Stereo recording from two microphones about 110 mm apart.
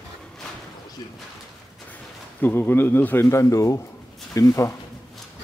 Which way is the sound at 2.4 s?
20° left (ahead or behind).